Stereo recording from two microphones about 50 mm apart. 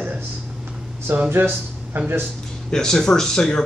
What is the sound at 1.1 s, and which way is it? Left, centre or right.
Speech, right.